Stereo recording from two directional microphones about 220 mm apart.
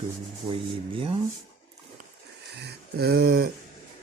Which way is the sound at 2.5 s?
50° right (ahead or behind).